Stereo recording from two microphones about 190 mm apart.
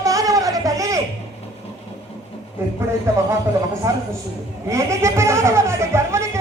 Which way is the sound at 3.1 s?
15° right (ahead or behind).